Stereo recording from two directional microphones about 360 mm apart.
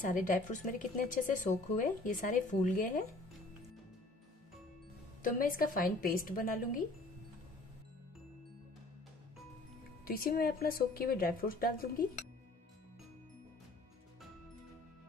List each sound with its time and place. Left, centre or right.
0.0 s a woman's voice: left
5.2 s a woman's voice: left
10.0 s a woman's voice: left